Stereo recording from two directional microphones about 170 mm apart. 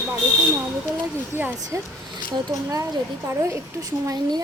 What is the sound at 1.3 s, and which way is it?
A woman's voice, 15° right (ahead or behind).